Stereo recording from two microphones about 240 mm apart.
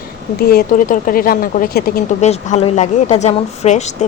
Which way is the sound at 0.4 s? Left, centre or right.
Left.